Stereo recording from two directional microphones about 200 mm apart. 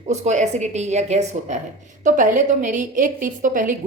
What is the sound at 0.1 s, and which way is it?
A woman's voice, 35° right (ahead or behind).